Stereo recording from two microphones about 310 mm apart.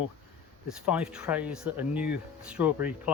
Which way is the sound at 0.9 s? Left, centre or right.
Centre.